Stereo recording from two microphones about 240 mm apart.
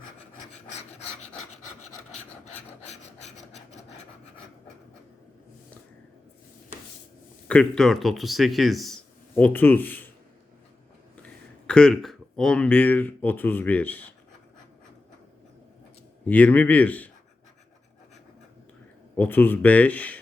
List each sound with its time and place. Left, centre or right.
0.8 s filing: left
2.4 s filing: left
7.4 s speech: centre
11.2 s speech: centre
16.2 s speech: centre
19.1 s speech: centre